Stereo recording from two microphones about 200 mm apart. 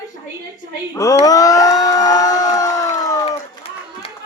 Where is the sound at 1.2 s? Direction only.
15° left (ahead or behind).